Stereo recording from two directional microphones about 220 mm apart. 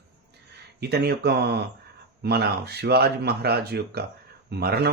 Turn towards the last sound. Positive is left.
turn(degrees=-45)  # may be behind; listen again after turning